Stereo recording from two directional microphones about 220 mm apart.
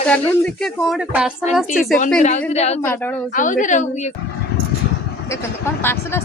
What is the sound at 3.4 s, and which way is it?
Speech, 35° left (ahead or behind).